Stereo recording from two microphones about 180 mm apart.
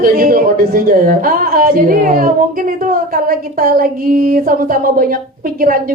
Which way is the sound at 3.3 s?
55° right (ahead or behind).